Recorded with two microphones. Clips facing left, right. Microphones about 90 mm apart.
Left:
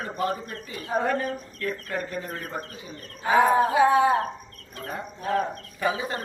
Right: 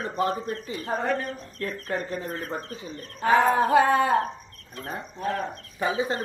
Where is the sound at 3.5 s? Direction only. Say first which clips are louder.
Even; 50° right (ahead or behind).